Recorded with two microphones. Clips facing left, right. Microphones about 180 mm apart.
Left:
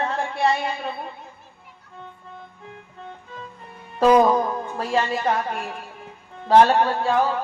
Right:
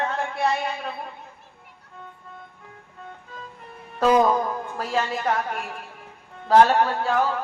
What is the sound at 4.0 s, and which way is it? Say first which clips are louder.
A woman's voice: left 3 dB; 30° left (ahead or behind).